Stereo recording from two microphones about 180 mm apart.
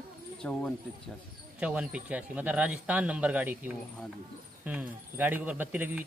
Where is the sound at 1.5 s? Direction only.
5° right (ahead or behind).